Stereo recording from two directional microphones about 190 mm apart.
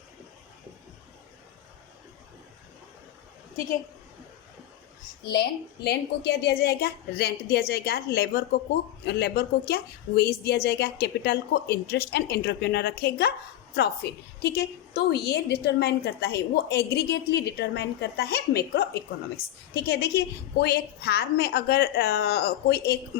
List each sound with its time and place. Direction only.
5.3 s a woman's voice: 60° left (ahead or behind)